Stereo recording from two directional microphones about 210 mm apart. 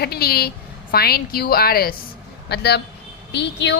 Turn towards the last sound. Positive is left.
turn(degrees=55)  # may be behind; listen again after turning